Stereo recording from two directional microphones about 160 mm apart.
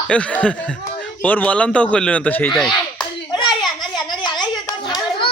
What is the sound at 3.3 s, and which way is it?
Children playing, 25° left (ahead or behind).